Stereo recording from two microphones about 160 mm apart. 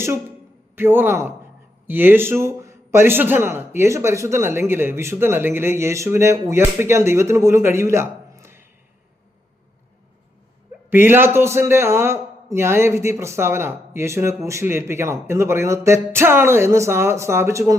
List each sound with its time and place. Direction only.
0.0 s a man's voice: 15° right (ahead or behind)
10.8 s a man's voice: 15° right (ahead or behind)